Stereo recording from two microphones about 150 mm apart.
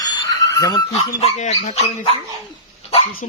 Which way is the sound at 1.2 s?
50° left (ahead or behind).